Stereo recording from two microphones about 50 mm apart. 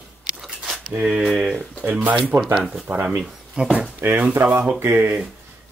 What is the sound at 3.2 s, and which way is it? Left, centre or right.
Speech, centre.